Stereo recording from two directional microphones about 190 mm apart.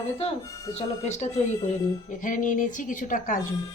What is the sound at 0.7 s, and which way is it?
A woman's voice, 35° left (ahead or behind).